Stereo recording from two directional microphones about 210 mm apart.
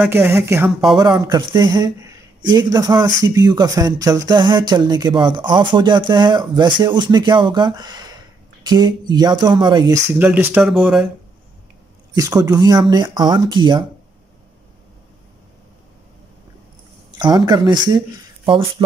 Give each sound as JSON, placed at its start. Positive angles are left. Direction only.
{"t": 0.0, "sound": "speech", "side_deg": -10}
{"t": 0.7, "sound": "speech", "side_deg": 0}
{"t": 0.9, "sound": "speech", "side_deg": -20}
{"t": 10.1, "sound": "speech", "side_deg": -5}
{"t": 12.1, "sound": "speech", "side_deg": -15}
{"t": 17.2, "sound": "speech", "side_deg": -20}